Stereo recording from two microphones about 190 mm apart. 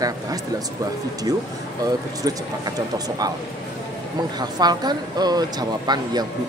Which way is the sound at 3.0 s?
20° right (ahead or behind).